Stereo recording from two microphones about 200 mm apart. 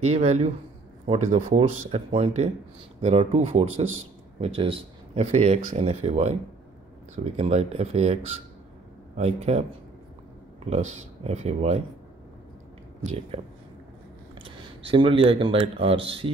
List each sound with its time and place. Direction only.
0.0 s speech: 35° right (ahead or behind)
13.0 s speech: 35° right (ahead or behind)
14.8 s speech: 25° right (ahead or behind)